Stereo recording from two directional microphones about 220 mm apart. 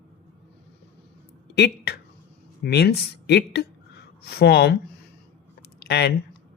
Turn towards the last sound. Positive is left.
turn(degrees=50)  # may be behind; listen again after turning